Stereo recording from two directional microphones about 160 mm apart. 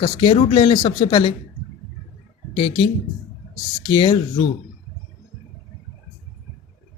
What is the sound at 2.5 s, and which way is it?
Speech, 30° left (ahead or behind).